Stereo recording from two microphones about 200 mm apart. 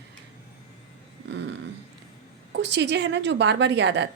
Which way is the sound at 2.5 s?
60° right (ahead or behind).